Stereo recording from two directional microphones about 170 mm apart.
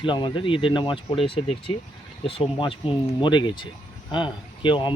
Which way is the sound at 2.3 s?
30° left (ahead or behind).